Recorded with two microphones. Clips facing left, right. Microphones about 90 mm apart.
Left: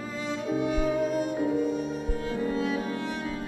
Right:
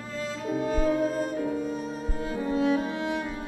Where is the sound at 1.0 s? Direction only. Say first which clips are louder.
Even; 40° right (ahead or behind).